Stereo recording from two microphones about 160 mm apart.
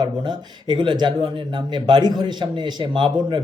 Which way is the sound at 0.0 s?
30° right (ahead or behind).